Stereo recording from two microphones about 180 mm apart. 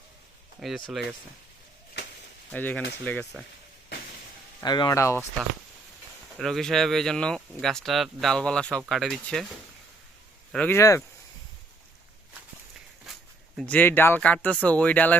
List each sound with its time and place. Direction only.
0.6 s speech: centre (ahead or behind)
2.5 s speech: 10° left (ahead or behind)
4.6 s speech: 25° left (ahead or behind)
6.4 s speech: centre (ahead or behind)
10.5 s speech: 10° left (ahead or behind)
13.6 s speech: 10° left (ahead or behind)